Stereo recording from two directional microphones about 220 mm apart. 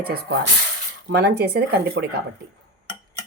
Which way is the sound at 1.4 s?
45° right (ahead or behind).